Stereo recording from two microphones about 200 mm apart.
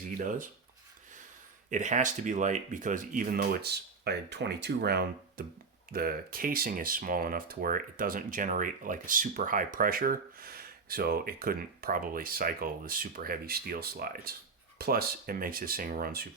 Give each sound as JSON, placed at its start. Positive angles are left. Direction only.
{"t": 1.7, "sound": "speech", "side_deg": -40}